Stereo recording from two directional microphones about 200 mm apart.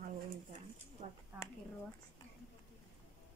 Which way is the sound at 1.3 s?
10° right (ahead or behind).